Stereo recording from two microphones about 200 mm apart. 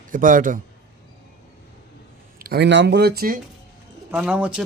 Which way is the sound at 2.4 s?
50° right (ahead or behind).